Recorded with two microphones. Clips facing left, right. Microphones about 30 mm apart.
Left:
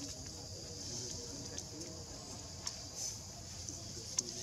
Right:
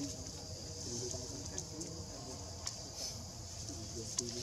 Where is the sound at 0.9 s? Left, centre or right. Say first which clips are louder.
Right 5 dB; centre.